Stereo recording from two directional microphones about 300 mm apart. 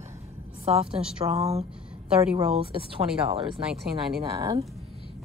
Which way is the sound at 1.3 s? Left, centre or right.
Right.